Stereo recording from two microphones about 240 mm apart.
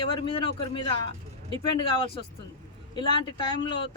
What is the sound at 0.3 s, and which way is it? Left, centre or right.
Speech, left.